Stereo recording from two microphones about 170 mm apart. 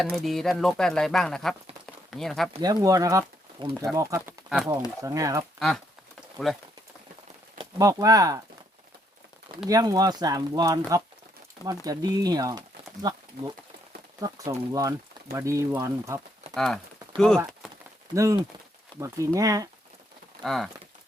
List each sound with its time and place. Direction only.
0.0 s speech: centre (ahead or behind)
2.6 s speech: 20° right (ahead or behind)
4.4 s speech: centre (ahead or behind)
5.0 s speech: 20° right (ahead or behind)
5.5 s speech: centre (ahead or behind)
7.6 s speech: 20° right (ahead or behind)
9.6 s speech: 20° right (ahead or behind)
16.6 s speech: 5° left (ahead or behind)
18.1 s speech: 20° right (ahead or behind)
20.4 s speech: centre (ahead or behind)